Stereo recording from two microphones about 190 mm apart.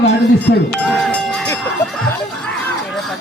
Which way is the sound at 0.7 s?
5° left (ahead or behind).